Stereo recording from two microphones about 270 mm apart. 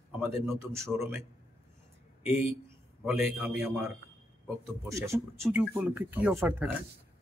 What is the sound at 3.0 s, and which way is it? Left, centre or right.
Speech, centre.